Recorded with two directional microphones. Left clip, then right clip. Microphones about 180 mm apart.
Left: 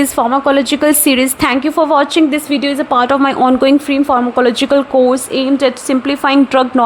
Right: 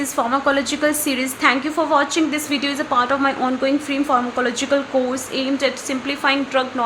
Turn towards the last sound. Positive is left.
turn(degrees=55)  # may be behind; listen again after turning